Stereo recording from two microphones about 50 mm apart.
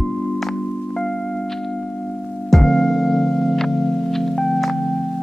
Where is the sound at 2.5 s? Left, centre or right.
Centre.